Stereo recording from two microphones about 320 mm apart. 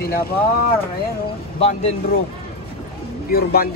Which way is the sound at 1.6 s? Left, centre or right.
Centre.